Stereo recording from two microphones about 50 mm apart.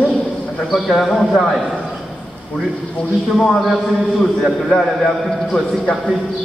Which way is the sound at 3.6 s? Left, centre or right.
Centre.